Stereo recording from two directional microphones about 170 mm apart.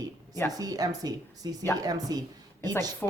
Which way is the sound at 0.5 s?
20° right (ahead or behind).